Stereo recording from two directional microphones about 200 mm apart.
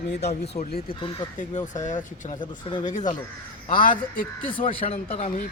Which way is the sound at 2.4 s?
25° left (ahead or behind).